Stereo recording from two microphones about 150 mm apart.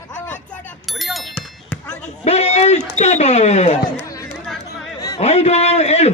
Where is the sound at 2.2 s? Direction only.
45° left (ahead or behind).